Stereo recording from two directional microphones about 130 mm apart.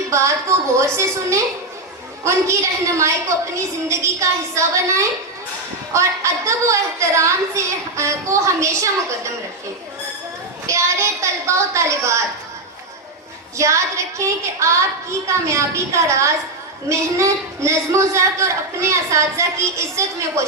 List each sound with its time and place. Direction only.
0.1 s speech: 20° right (ahead or behind)
10.7 s a sound: 20° right (ahead or behind)
13.6 s speech: 25° right (ahead or behind)